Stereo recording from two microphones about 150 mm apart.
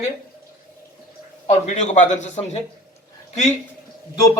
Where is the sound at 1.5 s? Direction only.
50° left (ahead or behind).